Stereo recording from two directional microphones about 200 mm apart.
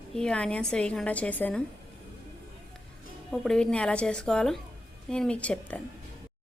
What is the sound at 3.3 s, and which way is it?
A woman's voice, 5° left (ahead or behind).